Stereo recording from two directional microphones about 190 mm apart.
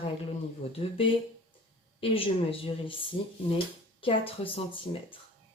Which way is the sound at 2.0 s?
30° left (ahead or behind).